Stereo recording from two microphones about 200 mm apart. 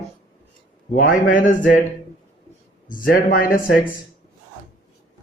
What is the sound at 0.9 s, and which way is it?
Speech, 45° left (ahead or behind).